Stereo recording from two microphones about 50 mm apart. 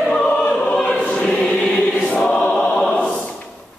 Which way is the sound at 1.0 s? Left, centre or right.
Left.